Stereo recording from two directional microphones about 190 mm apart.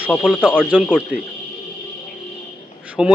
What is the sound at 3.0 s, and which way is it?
Speech, 5° right (ahead or behind).